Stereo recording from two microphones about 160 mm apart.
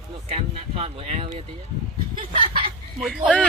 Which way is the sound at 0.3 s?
40° right (ahead or behind).